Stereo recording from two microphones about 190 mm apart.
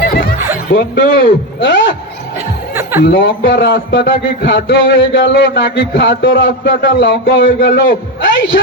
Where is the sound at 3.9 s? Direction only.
60° left (ahead or behind); by 7.8 s 80° left.